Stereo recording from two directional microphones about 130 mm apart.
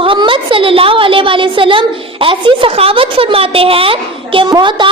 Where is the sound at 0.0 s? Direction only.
40° right (ahead or behind).